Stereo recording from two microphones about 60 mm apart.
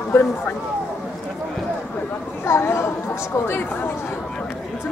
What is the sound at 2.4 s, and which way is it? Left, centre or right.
Speech, left.